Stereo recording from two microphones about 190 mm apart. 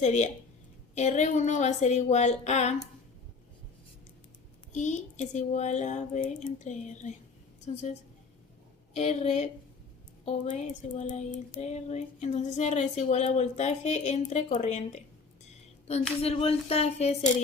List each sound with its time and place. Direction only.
0.0 s child singing: 35° left (ahead or behind)
4.7 s child singing: 40° left (ahead or behind)
9.0 s child singing: 35° left (ahead or behind)
16.2 s child singing: 30° left (ahead or behind)